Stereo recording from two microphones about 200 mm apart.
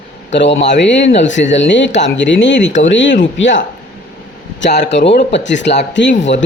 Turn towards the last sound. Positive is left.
turn(degrees=70)  # may be behind; listen again after turning